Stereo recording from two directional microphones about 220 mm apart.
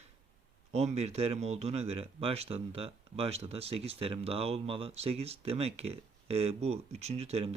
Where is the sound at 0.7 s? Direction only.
30° right (ahead or behind).